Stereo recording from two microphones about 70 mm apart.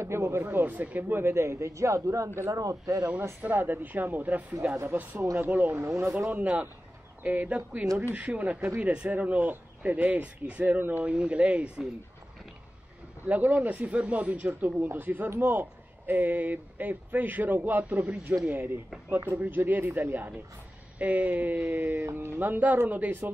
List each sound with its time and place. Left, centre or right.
0.0 s speech: right
2.6 s speech: right
3.3 s speech: right
5.8 s speech: right
6.3 s speech: right
13.3 s speech: right